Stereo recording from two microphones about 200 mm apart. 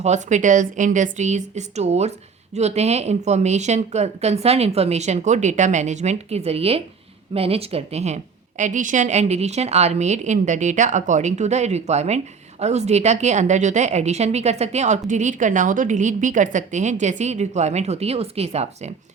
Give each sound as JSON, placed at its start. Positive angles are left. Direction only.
{"t": 0.0, "sound": "a woman's voice", "side_deg": -35}